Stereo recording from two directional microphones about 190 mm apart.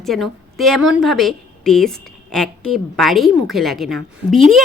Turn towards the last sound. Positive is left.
turn(degrees=-40)  # may be behind; listen again after turning